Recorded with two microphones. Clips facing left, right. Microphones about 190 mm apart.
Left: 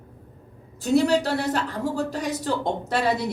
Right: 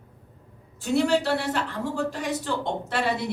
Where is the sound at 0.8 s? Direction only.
40° left (ahead or behind).